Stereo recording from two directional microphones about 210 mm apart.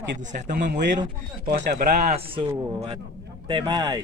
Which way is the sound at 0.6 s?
50° right (ahead or behind).